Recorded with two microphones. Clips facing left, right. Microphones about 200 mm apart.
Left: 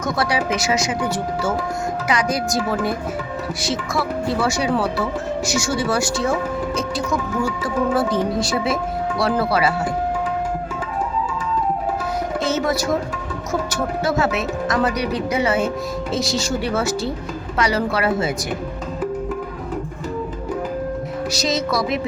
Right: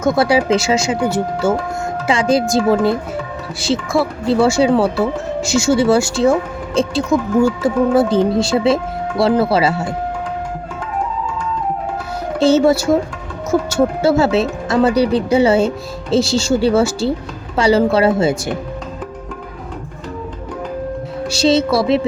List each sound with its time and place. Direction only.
0.0 s speech: 25° right (ahead or behind)
12.4 s speech: 30° right (ahead or behind)
21.3 s speech: 30° right (ahead or behind)